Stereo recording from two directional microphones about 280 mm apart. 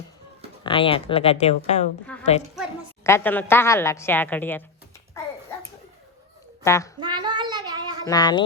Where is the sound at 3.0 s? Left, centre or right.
Centre.